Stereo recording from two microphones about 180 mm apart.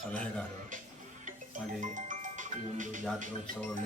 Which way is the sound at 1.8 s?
45° right (ahead or behind).